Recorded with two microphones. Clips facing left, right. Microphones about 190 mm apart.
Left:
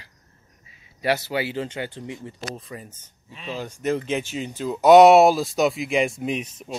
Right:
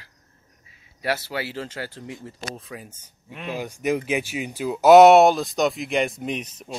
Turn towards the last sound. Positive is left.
turn(degrees=0)  # may be behind; listen again after turning